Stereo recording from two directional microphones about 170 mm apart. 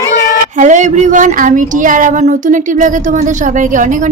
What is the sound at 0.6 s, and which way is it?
Speech, 45° right (ahead or behind).